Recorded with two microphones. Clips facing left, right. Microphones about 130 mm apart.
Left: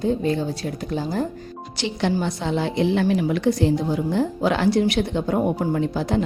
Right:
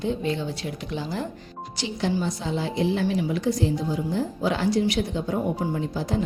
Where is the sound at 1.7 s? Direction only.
70° left (ahead or behind).